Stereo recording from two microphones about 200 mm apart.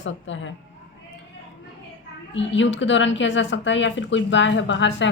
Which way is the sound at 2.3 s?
65° left (ahead or behind).